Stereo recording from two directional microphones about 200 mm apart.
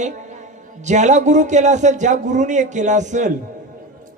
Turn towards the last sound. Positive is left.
turn(degrees=-35)  # may be behind; listen again after turning